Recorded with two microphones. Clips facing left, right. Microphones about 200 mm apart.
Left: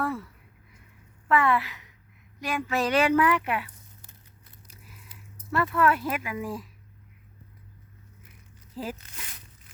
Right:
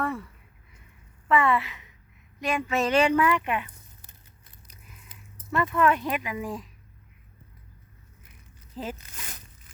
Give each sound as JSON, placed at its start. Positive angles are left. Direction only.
{"t": 0.0, "sound": "speech", "side_deg": 5}
{"t": 1.3, "sound": "a woman's voice", "side_deg": 0}
{"t": 5.7, "sound": "a woman's voice", "side_deg": 5}
{"t": 8.7, "sound": "speech", "side_deg": 5}
{"t": 9.2, "sound": "zipper", "side_deg": -45}